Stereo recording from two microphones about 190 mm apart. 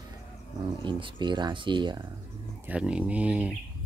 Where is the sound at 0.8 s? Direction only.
25° right (ahead or behind).